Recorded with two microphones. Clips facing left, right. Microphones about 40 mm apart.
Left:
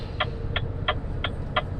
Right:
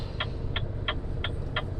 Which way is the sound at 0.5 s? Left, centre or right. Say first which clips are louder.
Left 6 dB; left.